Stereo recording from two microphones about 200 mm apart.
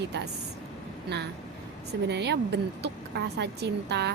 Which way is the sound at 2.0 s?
55° right (ahead or behind).